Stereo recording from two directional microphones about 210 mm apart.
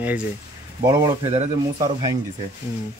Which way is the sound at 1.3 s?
30° right (ahead or behind).